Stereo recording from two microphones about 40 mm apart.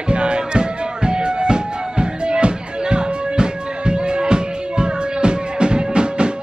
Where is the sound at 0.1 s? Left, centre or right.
Right.